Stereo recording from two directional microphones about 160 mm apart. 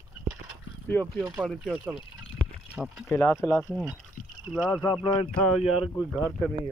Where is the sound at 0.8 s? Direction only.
10° left (ahead or behind).